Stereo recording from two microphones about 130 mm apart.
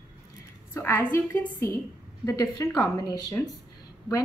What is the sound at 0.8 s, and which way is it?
A woman's voice, 20° left (ahead or behind).